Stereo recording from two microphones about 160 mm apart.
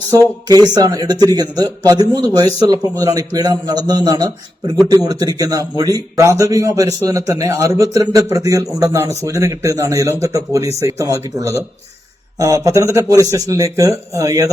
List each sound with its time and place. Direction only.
0.1 s a man's voice: 20° right (ahead or behind)